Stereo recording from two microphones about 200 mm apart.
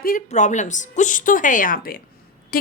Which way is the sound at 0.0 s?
40° left (ahead or behind).